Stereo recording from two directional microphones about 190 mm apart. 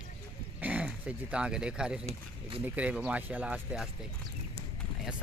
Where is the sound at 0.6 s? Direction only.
5° right (ahead or behind).